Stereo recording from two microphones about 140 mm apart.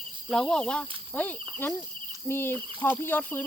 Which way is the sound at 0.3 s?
5° left (ahead or behind).